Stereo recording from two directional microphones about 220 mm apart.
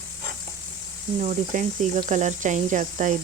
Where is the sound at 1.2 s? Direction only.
35° right (ahead or behind).